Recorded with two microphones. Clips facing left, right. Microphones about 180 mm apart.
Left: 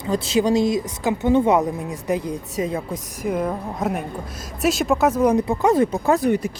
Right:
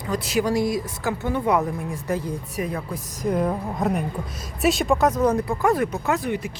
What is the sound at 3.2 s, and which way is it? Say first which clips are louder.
A woman's voice: right 1 dB; 5° left (ahead or behind).